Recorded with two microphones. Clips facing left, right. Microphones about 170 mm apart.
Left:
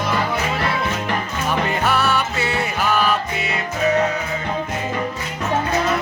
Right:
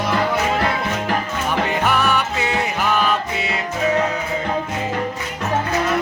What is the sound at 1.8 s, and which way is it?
Music, 15° right (ahead or behind).